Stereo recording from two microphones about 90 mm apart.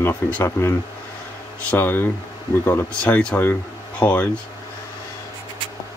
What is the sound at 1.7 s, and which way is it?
Speech, 20° left (ahead or behind).